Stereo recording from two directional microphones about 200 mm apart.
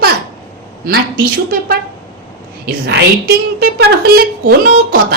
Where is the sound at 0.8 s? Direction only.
50° right (ahead or behind).